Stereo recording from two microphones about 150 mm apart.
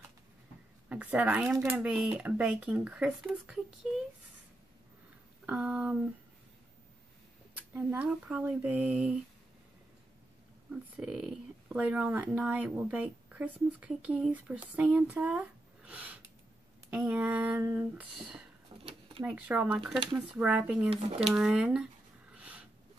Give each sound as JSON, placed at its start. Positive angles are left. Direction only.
{"t": 0.8, "sound": "speech", "side_deg": -10}
{"t": 5.5, "sound": "speech", "side_deg": -5}
{"t": 7.5, "sound": "speech", "side_deg": -10}
{"t": 10.7, "sound": "speech", "side_deg": -5}
{"t": 18.7, "sound": "a sound", "side_deg": -30}
{"t": 19.2, "sound": "speech", "side_deg": -10}
{"t": 22.3, "sound": "a sound", "side_deg": -10}